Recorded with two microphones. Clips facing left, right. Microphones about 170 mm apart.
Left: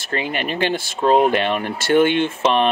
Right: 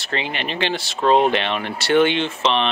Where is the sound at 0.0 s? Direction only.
45° left (ahead or behind).